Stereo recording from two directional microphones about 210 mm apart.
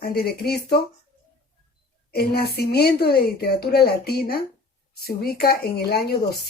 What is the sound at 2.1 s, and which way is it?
A woman's voice, 50° left (ahead or behind).